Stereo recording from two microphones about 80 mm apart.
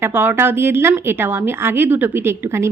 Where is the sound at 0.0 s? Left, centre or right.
Right.